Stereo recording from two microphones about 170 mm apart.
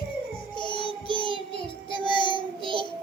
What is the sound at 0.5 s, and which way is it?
Music, 25° left (ahead or behind).